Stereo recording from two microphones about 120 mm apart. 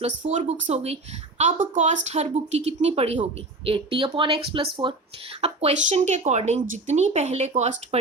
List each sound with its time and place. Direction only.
0.0 s speech: 80° right; by 0.9 s 65° right (ahead or behind)
1.4 s speech: 90° right; by 3.2 s 60° right (ahead or behind)
3.7 s speech: 45° right (ahead or behind)
5.4 s speech: 60° right (ahead or behind)
6.8 s speech: 85° right